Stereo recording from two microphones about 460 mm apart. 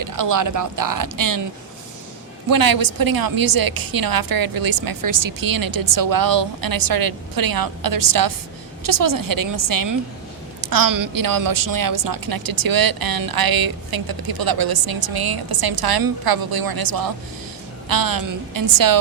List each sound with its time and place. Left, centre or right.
0.0 s speech: right
2.5 s a woman's voice: right